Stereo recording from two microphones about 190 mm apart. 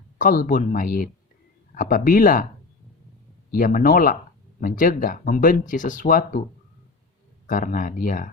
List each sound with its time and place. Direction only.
0.2 s speech: 45° left (ahead or behind)
3.5 s speech: 45° left (ahead or behind)
7.4 s speech: 45° left (ahead or behind)